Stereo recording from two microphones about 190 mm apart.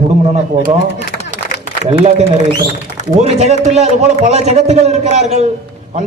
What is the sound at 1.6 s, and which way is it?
A man's voice, 35° right (ahead or behind).